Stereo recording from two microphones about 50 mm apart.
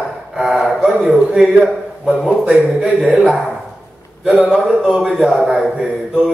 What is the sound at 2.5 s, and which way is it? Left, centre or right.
Speech, centre.